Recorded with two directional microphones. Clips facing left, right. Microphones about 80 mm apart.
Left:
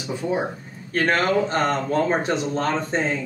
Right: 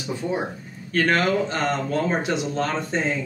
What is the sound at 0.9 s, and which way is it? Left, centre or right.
Speech, left.